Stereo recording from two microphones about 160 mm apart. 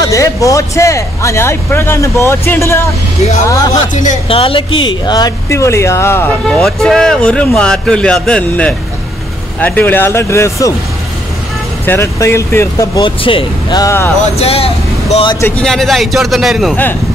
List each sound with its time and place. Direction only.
0.0 s speech: 20° left (ahead or behind)
3.9 s speech: 50° left (ahead or behind)
4.3 s speech: 35° left (ahead or behind); by 10.7 s 15° left (ahead or behind)
11.8 s speech: 15° left (ahead or behind)
13.2 s speech: 35° left (ahead or behind); by 14.1 s 15° left (ahead or behind)
14.3 s speech: 40° left (ahead or behind)
15.4 s a man's voice: 5° left (ahead or behind)